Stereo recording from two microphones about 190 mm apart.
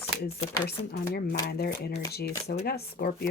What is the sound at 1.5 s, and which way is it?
Speech, 55° left (ahead or behind).